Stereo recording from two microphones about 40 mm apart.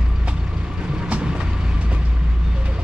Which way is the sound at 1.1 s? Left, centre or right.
Right.